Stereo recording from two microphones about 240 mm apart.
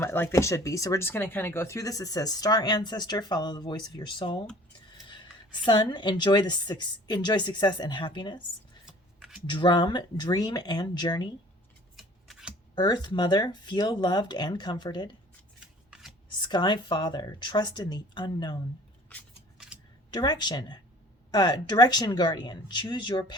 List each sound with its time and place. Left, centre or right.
0.0 s speech: centre
8.9 s a sound: centre
9.5 s speech: centre
11.9 s scissors: centre
12.7 s speech: centre
15.6 s scissors: centre
16.4 s a woman's voice: centre
19.0 s scissors: centre
20.1 s speech: centre